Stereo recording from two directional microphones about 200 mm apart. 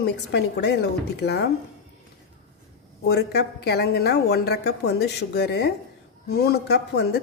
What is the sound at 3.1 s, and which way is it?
A woman's voice, 55° left (ahead or behind).